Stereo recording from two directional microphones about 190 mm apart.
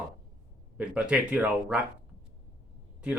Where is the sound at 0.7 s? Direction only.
5° right (ahead or behind).